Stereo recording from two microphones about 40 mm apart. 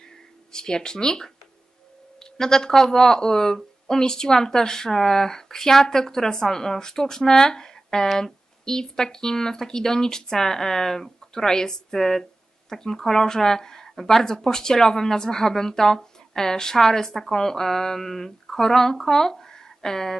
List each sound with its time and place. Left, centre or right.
0.5 s speech: centre
2.3 s speech: centre